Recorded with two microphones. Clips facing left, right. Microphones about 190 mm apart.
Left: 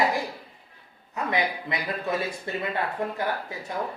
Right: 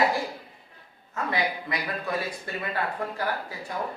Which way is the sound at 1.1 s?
20° left (ahead or behind).